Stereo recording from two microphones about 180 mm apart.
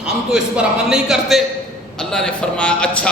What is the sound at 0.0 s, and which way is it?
Speech, 5° right (ahead or behind).